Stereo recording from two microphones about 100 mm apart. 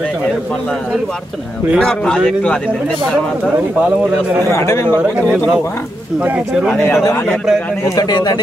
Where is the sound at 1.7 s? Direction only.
5° left (ahead or behind).